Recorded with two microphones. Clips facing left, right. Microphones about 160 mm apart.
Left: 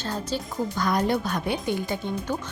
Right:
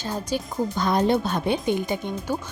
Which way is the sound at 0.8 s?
25° right (ahead or behind).